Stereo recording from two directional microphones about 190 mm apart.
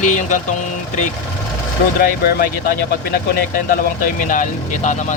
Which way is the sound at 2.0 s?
50° left (ahead or behind).